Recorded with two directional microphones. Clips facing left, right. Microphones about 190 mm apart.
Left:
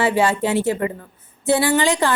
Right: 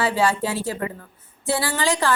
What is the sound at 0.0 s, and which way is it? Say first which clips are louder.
A woman's voice: left 3 dB; 25° left (ahead or behind).